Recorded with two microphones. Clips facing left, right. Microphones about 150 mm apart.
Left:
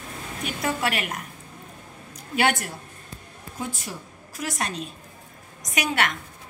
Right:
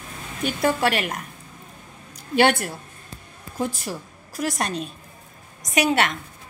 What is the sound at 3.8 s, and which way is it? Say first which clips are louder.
Speech: right 5 dB; 40° right (ahead or behind).